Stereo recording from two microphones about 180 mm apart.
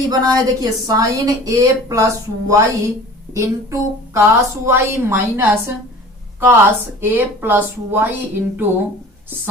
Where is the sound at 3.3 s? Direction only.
15° right (ahead or behind).